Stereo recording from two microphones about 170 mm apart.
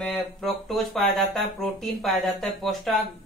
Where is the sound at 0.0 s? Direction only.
Centre (ahead or behind).